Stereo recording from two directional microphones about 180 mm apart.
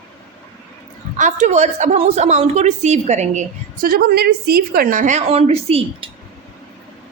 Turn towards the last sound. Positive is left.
turn(degrees=-35)  # may be behind; listen again after turning